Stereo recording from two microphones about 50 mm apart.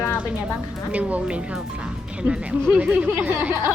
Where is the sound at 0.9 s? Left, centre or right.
Right.